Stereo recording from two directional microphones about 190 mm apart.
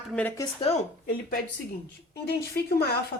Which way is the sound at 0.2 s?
10° left (ahead or behind).